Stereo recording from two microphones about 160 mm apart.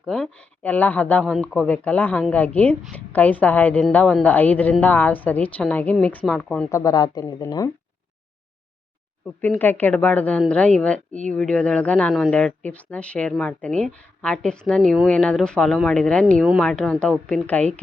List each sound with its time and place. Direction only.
0.0 s a woman's voice: 5° left (ahead or behind)
6.7 s speech: 20° left (ahead or behind)
9.4 s a woman's voice: 10° left (ahead or behind)